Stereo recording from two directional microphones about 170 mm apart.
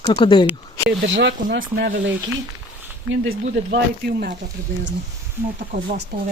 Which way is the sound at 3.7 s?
75° right (ahead or behind).